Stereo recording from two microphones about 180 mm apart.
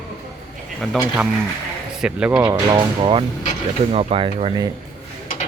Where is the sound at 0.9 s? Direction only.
5° right (ahead or behind).